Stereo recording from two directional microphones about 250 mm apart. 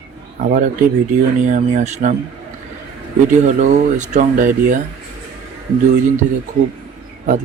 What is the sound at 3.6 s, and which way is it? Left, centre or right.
Speech, right.